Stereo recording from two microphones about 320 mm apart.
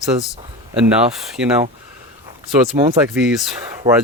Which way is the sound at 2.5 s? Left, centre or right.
Centre.